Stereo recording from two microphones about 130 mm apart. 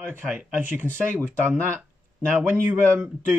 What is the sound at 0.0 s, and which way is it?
Speech, 15° right (ahead or behind).